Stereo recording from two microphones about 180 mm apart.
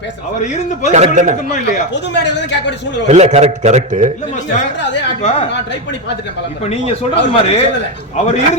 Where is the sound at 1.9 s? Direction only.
75° left (ahead or behind).